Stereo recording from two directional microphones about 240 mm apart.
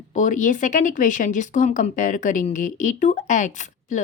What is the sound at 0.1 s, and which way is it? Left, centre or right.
Speech, left.